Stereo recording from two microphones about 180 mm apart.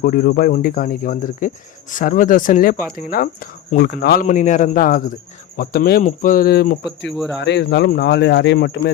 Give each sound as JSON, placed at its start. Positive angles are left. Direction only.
{"t": 0.0, "sound": "speech", "side_deg": 55}
{"t": 4.3, "sound": "speech", "side_deg": 45}
{"t": 5.5, "sound": "speech", "side_deg": 60}
{"t": 6.0, "sound": "speech", "side_deg": 45}
{"t": 7.3, "sound": "speech", "side_deg": 75}